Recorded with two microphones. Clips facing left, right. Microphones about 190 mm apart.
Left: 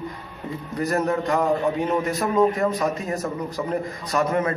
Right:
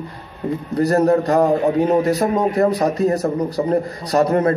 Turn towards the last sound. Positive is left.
turn(degrees=-40)  # may be behind; listen again after turning